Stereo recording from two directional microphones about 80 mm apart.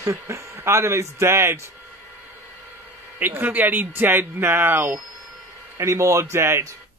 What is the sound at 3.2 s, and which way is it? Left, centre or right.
Speech, right.